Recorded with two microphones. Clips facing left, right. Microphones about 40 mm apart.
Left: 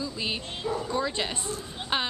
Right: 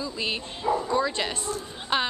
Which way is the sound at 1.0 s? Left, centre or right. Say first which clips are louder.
Right 3 dB; centre.